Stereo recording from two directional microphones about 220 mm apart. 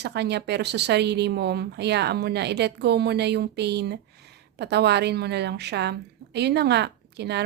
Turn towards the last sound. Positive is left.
turn(degrees=-50)  # may be behind; listen again after turning